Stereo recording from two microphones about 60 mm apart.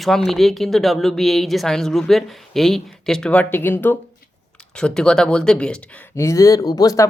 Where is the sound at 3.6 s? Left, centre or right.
Left.